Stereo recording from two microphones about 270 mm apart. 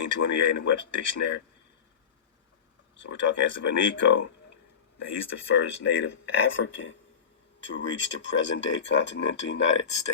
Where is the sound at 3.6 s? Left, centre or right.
Left.